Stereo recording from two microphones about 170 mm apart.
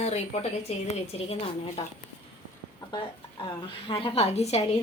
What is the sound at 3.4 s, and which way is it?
Speech, 30° left (ahead or behind).